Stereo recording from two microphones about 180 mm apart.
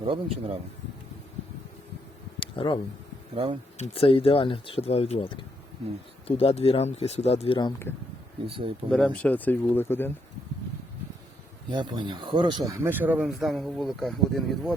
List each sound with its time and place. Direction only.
0.0 s speech: 30° right (ahead or behind)
2.4 s a sound: 30° left (ahead or behind)
3.3 s speech: 30° right (ahead or behind)
3.8 s speech: 30° left (ahead or behind)
8.4 s speech: 30° right (ahead or behind)
8.9 s speech: 5° left (ahead or behind)
11.7 s speech: 25° right (ahead or behind)
12.8 s speech: 10° right (ahead or behind)